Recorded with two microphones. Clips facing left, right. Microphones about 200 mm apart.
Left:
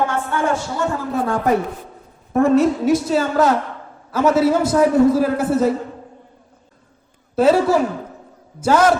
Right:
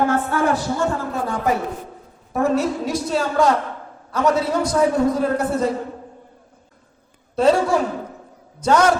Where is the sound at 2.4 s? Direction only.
Centre (ahead or behind).